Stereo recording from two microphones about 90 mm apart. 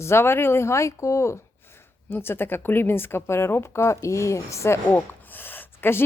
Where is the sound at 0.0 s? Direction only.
25° left (ahead or behind).